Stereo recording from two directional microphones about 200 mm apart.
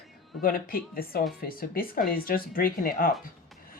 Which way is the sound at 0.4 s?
45° left (ahead or behind).